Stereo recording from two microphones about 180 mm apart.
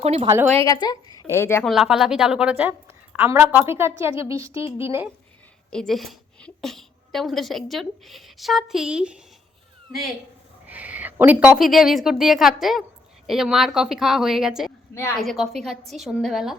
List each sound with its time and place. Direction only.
0.0 s a woman's voice: 35° right (ahead or behind)
0.6 s speech: 20° left (ahead or behind)
1.6 s a woman's voice: centre (ahead or behind)
5.7 s a woman's voice: centre (ahead or behind)
10.7 s a woman's voice: 10° right (ahead or behind)